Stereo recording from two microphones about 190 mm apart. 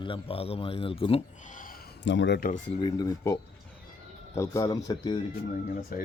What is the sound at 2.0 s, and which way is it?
Speech, 70° left (ahead or behind).